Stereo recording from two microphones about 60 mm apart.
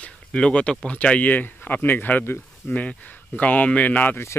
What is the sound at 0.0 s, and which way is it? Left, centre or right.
Speech, centre.